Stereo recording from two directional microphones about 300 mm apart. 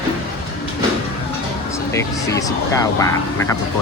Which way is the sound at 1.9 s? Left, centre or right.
Centre.